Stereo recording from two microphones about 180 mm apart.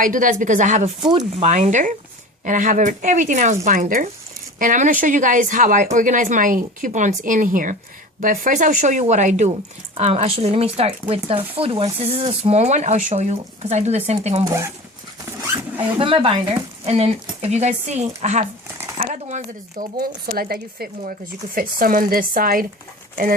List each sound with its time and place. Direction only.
0.0 s speech: 45° right (ahead or behind)
14.4 s speech: 15° right (ahead or behind)
16.0 s speech: 30° right (ahead or behind)
20.0 s speech: 55° right (ahead or behind)